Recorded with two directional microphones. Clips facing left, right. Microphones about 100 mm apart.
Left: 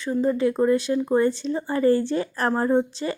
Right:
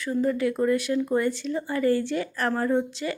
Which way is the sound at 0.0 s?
25° left (ahead or behind).